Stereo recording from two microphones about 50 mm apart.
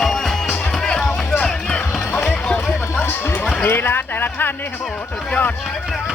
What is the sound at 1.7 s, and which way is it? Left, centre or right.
Music, left.